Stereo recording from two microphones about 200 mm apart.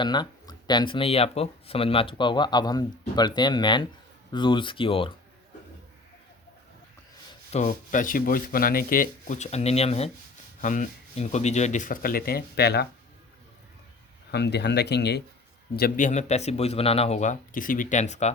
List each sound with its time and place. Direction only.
0.0 s speech: 20° left (ahead or behind)
7.5 s speech: 35° left (ahead or behind); by 12.9 s 55° left (ahead or behind)
14.3 s speech: 55° left (ahead or behind)
15.7 s speech: 45° left (ahead or behind)